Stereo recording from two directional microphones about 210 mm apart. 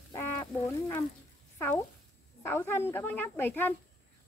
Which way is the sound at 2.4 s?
10° left (ahead or behind).